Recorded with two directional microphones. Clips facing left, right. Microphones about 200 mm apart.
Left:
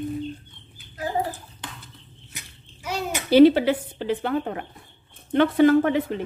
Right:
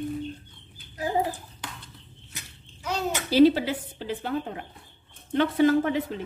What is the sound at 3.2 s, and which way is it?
Speech, 65° left (ahead or behind).